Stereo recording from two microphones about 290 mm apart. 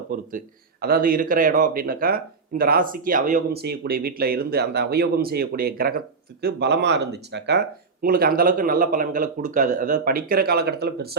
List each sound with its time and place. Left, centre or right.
0.3 s speech: right